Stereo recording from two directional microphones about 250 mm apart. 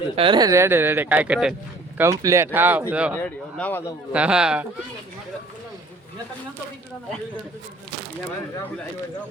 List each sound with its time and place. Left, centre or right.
0.2 s speech: centre
3.2 s speech: centre
4.1 s speech: centre